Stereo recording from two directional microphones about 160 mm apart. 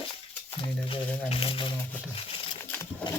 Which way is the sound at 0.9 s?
35° left (ahead or behind).